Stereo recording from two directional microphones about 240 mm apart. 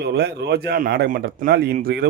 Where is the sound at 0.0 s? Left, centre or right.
Right.